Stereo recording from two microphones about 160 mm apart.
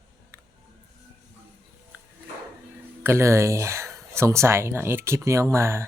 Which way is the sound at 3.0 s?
15° right (ahead or behind).